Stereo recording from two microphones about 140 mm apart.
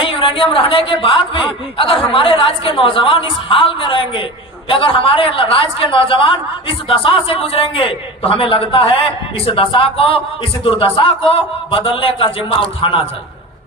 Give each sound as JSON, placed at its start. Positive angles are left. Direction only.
{"t": 0.0, "sound": "a woman's voice", "side_deg": 40}